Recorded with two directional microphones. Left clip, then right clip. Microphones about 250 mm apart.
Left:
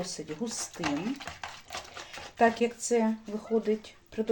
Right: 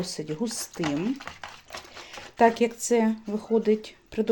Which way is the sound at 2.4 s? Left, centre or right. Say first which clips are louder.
Right 4 dB; right.